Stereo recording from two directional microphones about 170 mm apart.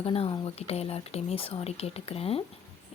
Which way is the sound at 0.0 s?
35° left (ahead or behind).